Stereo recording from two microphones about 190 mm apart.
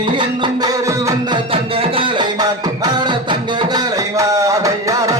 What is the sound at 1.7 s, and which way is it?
Music, 30° right (ahead or behind).